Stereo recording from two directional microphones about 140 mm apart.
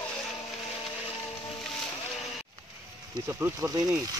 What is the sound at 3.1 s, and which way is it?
Speech, 20° right (ahead or behind).